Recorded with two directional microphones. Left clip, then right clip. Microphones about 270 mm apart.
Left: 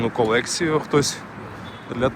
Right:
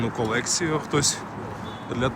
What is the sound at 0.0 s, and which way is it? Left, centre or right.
Speech, centre.